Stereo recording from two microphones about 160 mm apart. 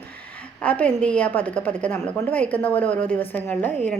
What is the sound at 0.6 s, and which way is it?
A woman's voice, 10° left (ahead or behind).